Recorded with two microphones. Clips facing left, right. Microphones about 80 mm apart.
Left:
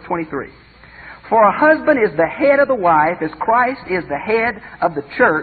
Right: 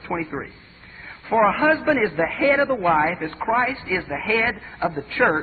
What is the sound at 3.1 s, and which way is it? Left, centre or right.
A woman's voice, left.